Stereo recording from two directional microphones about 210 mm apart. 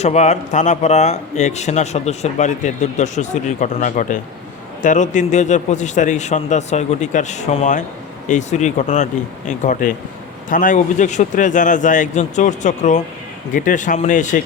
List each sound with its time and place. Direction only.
0.0 s speech: 30° left (ahead or behind)